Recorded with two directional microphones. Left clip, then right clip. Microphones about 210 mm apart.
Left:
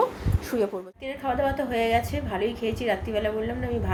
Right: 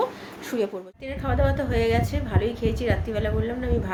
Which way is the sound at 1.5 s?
Centre (ahead or behind).